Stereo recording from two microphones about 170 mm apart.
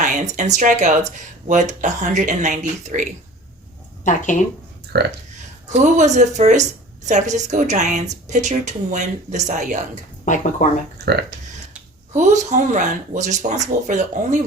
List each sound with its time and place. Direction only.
0.0 s a woman's voice: 45° right (ahead or behind)
4.0 s speech: 45° left (ahead or behind)
4.9 s speech: 75° right (ahead or behind)
5.6 s a woman's voice: 45° right (ahead or behind)
10.2 s speech: 45° left (ahead or behind)
10.9 s speech: 70° right (ahead or behind)
12.1 s a woman's voice: 45° right (ahead or behind)